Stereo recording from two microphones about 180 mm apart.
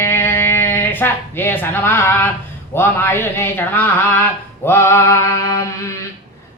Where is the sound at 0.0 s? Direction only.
10° left (ahead or behind).